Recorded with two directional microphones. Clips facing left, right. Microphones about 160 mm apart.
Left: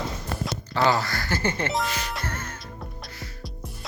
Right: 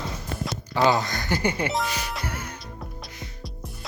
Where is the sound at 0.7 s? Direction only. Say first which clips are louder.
Right 1 dB; 20° right (ahead or behind).